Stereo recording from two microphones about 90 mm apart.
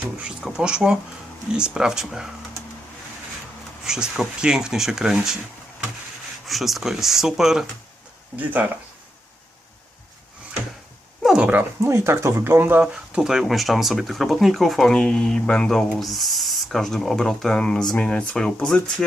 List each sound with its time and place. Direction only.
0.0 s speech: 10° right (ahead or behind)
3.8 s speech: 5° right (ahead or behind)
6.5 s speech: centre (ahead or behind)
8.4 s speech: 20° right (ahead or behind)
11.2 s dog: 5° right (ahead or behind)
11.8 s speech: 30° right (ahead or behind); by 19.0 s 5° left (ahead or behind)